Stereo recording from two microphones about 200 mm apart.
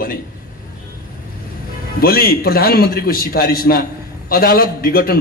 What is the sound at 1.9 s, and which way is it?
A man's voice, 50° left (ahead or behind).